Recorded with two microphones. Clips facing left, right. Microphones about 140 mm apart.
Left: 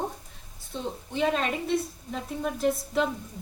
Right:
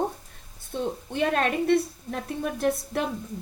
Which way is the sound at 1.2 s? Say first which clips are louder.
Right 2 dB; 60° right (ahead or behind).